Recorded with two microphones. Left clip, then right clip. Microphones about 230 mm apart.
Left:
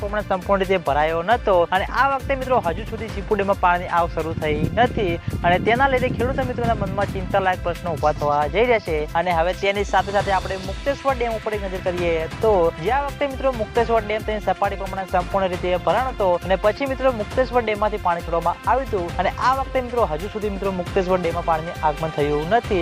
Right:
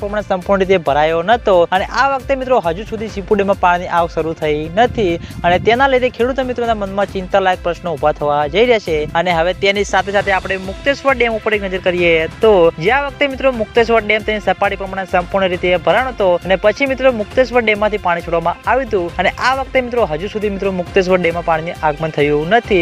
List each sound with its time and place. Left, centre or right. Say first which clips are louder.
0.1 s speech: right 5 dB; right